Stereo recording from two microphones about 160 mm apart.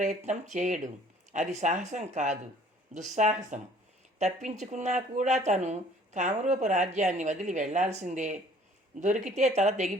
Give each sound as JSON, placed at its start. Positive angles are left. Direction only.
{"t": 0.0, "sound": "speech", "side_deg": -50}